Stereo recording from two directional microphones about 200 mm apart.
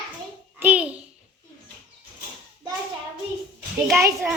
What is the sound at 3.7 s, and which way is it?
Speech, 15° right (ahead or behind).